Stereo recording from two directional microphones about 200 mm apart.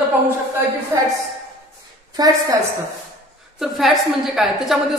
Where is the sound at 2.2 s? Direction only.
20° right (ahead or behind).